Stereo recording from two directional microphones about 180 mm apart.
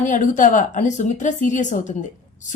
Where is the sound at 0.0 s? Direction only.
45° left (ahead or behind).